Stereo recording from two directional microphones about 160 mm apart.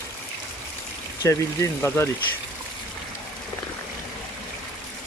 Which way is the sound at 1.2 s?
15° left (ahead or behind).